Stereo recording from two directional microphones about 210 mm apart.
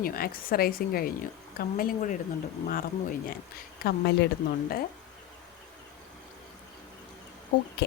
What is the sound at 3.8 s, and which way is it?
Speech, 50° left (ahead or behind).